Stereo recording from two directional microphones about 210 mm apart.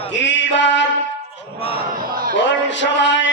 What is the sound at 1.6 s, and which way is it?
Speech, 25° left (ahead or behind).